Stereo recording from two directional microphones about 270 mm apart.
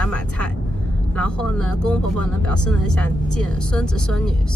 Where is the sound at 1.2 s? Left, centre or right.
Centre.